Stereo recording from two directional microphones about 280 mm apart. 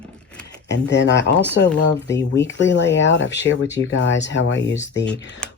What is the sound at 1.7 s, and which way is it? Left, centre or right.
Speech, centre.